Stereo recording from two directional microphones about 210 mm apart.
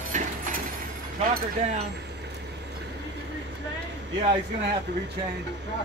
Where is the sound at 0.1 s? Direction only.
35° right (ahead or behind).